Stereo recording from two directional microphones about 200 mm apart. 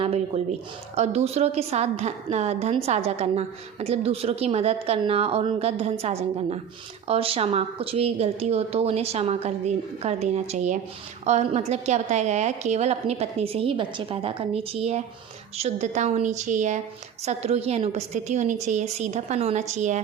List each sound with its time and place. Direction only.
0.0 s a woman's voice: 30° right (ahead or behind)